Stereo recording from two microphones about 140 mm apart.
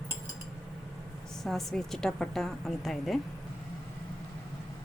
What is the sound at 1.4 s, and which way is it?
A woman's voice, 5° left (ahead or behind).